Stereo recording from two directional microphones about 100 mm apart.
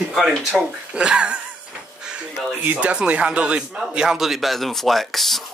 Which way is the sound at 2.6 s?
15° right (ahead or behind).